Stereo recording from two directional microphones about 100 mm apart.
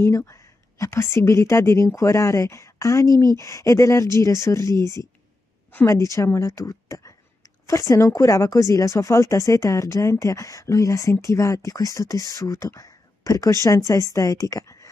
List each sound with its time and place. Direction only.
0.1 s a woman's voice: 30° left (ahead or behind)